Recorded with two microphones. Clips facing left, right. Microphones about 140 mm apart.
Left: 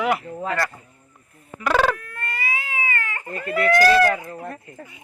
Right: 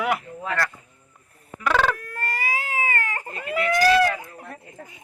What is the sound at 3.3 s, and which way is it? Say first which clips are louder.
Speech: left 2 dB; 15° right (ahead or behind).